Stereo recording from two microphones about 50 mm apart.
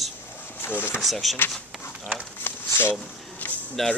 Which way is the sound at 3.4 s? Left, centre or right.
Left.